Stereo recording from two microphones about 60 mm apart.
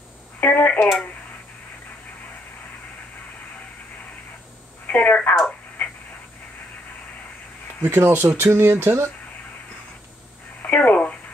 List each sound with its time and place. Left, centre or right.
0.4 s telephone: left
4.8 s a sound: left
7.8 s speech: right
10.6 s telephone: left